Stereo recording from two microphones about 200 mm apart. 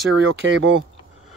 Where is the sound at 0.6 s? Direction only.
75° right (ahead or behind).